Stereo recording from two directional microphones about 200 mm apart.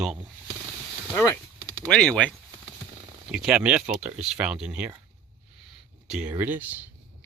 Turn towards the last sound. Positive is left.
turn(degrees=-10)  # may be behind; listen again after turning